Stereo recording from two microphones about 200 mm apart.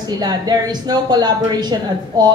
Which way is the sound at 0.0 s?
20° right (ahead or behind).